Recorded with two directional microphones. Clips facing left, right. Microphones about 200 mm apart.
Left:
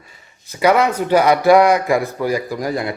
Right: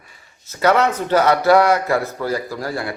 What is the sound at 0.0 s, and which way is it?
A man's voice, 15° left (ahead or behind).